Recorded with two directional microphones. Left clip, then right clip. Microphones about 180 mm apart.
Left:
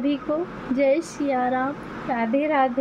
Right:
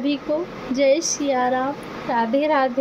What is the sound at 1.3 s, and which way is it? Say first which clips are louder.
Speech: right 2 dB; 15° left (ahead or behind).